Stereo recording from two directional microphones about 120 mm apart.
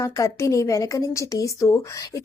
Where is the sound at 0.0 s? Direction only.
25° left (ahead or behind).